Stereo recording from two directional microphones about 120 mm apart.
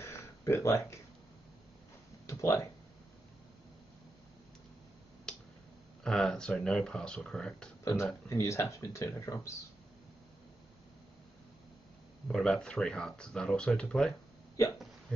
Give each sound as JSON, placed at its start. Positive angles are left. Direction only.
{"t": 0.0, "sound": "a sound", "side_deg": 20}
{"t": 2.2, "sound": "a sound", "side_deg": 25}
{"t": 5.3, "sound": "tick-tock", "side_deg": 5}
{"t": 6.0, "sound": "speech", "side_deg": 5}
{"t": 7.8, "sound": "speech", "side_deg": 25}
{"t": 12.3, "sound": "speech", "side_deg": 5}